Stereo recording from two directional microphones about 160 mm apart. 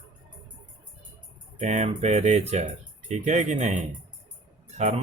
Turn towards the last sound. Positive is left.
turn(degrees=-40)  # may be behind; listen again after turning